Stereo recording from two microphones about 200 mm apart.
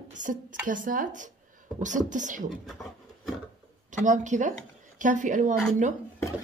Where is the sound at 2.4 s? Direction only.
Centre (ahead or behind).